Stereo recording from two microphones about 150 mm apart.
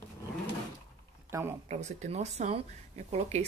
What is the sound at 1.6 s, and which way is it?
Speech, 50° right (ahead or behind).